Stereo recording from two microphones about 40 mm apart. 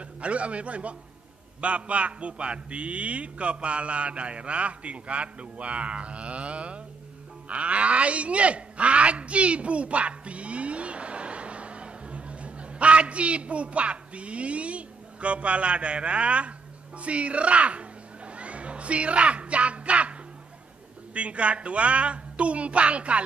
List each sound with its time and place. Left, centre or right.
0.0 s a man's voice: right